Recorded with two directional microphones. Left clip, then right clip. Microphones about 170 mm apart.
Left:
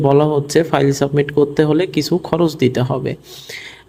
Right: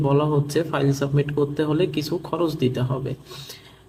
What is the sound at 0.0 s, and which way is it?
Speech, 45° left (ahead or behind).